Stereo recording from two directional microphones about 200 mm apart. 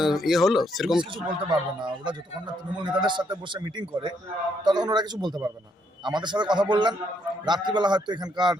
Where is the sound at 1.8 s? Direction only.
25° right (ahead or behind).